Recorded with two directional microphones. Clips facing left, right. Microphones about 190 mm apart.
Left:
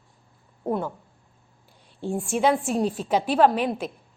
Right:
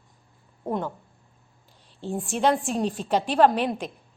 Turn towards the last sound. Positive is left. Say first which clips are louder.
# even
turn(degrees=5)  # may be behind; listen again after turning